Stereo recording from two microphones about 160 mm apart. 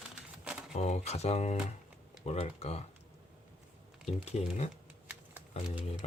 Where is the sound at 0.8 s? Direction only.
40° left (ahead or behind).